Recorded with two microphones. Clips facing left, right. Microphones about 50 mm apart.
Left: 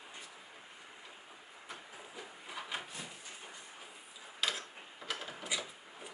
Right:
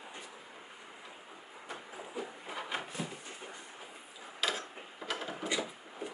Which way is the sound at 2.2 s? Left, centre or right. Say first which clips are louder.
Right 6 dB; centre.